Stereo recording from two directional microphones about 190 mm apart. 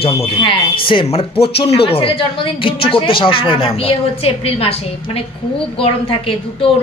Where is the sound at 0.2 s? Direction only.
30° left (ahead or behind).